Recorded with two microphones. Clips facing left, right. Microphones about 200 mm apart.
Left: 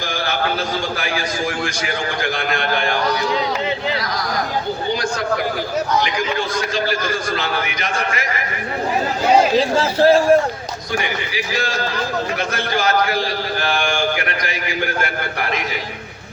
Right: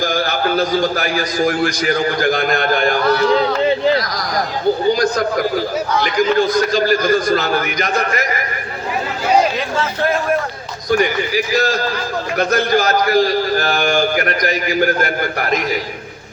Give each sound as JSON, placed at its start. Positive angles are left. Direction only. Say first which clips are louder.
{"t": 0.0, "sound": "a man's voice", "louder": "right 4 dB", "side_deg": -40}
{"t": 3.0, "sound": "a sound", "louder": "right 6 dB", "side_deg": 15}
{"t": 6.5, "sound": "a man's voice", "louder": "right 6 dB", "side_deg": -40}
{"t": 9.6, "sound": "a man's voice", "louder": "left 4 dB", "side_deg": 30}
{"t": 10.9, "sound": "a man's voice", "louder": "right 8 dB", "side_deg": -45}